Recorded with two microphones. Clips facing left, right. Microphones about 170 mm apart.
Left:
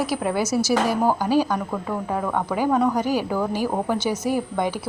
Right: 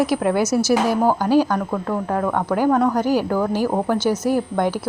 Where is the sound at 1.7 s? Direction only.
Centre (ahead or behind).